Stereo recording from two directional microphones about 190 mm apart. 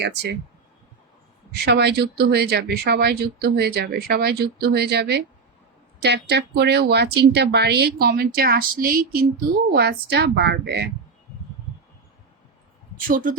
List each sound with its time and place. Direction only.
0.0 s speech: 65° right (ahead or behind)
1.6 s speech: 60° right (ahead or behind)
13.1 s speech: 45° right (ahead or behind)